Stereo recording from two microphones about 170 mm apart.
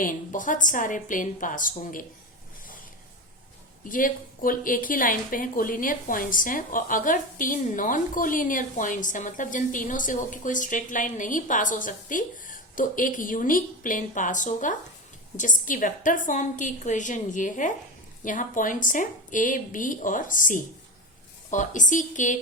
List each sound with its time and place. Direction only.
0.0 s a woman's voice: 50° left (ahead or behind)
3.8 s a woman's voice: 55° left (ahead or behind)